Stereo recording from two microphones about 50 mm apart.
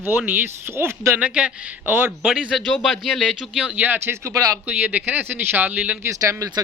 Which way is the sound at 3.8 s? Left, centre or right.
Right.